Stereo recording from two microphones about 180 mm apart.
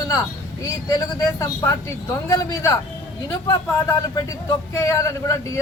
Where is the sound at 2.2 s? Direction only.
15° left (ahead or behind).